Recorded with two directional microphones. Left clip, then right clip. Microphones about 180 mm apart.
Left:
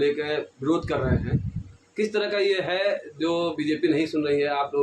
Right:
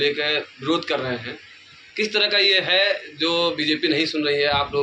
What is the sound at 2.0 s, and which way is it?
A man's voice, 45° left (ahead or behind).